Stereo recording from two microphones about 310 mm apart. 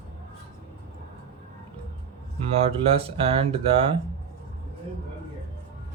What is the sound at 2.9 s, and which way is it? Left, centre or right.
Speech, centre.